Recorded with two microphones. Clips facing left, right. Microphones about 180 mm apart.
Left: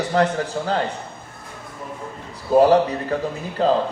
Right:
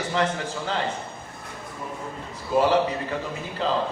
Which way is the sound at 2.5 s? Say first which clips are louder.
Left 6 dB; 40° left (ahead or behind).